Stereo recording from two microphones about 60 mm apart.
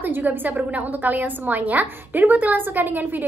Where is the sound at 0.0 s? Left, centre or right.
Right.